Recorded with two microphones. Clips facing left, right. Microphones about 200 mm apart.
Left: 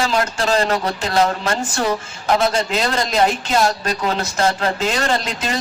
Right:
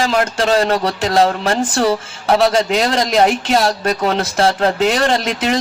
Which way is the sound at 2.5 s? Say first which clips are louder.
Right 4 dB; 70° right (ahead or behind).